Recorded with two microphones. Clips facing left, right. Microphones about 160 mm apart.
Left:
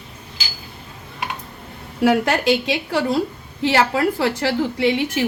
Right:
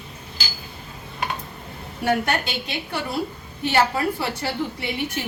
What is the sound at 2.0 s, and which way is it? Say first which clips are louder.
A woman's voice: left 6 dB; 90° left.